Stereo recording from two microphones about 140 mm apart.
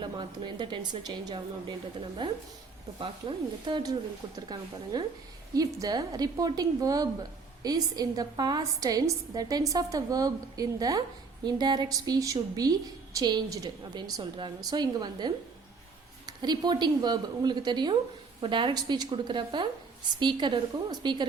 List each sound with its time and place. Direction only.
0.0 s a woman's voice: 35° right (ahead or behind)